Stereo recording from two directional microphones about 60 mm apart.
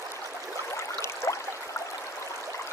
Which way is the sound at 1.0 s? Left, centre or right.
Left.